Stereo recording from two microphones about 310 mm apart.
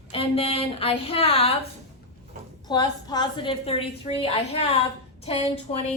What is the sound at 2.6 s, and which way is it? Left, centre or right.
A woman's voice, centre.